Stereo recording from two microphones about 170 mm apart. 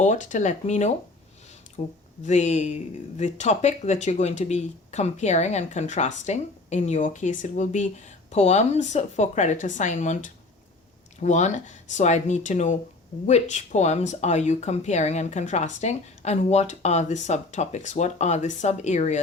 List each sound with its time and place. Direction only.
0.0 s speech: 45° left (ahead or behind)
2.2 s speech: 45° left (ahead or behind)